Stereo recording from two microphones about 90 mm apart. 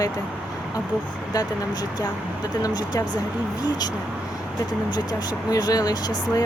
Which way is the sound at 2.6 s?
50° left (ahead or behind).